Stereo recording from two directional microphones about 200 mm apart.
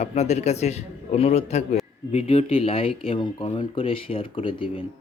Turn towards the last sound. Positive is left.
turn(degrees=25)  # may be behind; listen again after turning